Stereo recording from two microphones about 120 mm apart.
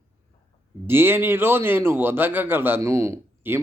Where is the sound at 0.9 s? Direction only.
20° right (ahead or behind).